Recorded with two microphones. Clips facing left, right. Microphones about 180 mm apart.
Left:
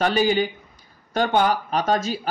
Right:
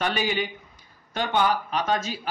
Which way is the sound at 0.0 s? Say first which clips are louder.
Left 6 dB; 35° left (ahead or behind).